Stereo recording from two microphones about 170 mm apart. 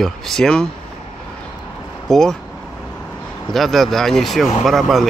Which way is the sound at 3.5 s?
Centre (ahead or behind).